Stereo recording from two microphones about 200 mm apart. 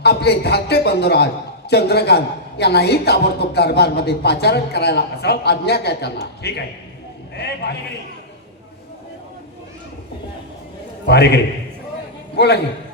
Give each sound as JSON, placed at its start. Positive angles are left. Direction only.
{"t": 0.0, "sound": "a man's voice", "side_deg": 55}
{"t": 11.0, "sound": "a man's voice", "side_deg": 55}
{"t": 12.4, "sound": "a man's voice", "side_deg": 55}